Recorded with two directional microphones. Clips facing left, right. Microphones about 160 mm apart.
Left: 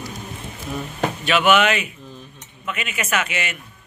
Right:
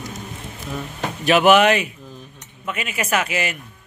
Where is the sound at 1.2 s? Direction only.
40° right (ahead or behind).